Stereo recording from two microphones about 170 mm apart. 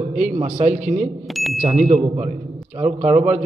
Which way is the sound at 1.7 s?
40° right (ahead or behind).